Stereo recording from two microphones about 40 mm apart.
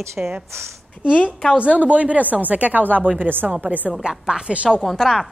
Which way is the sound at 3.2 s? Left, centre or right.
Right.